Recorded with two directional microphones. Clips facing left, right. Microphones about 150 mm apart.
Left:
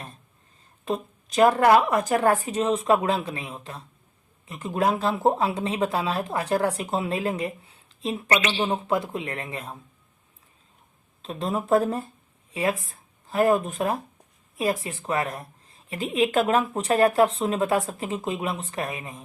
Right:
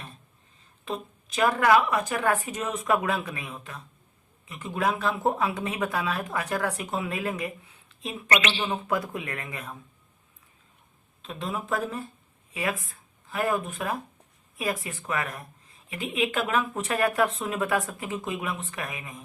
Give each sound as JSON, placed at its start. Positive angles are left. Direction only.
{"t": 0.9, "sound": "a woman's voice", "side_deg": 40}
{"t": 11.2, "sound": "a woman's voice", "side_deg": 35}